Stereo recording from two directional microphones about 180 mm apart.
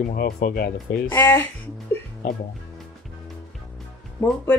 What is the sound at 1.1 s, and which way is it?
Speech, 15° left (ahead or behind).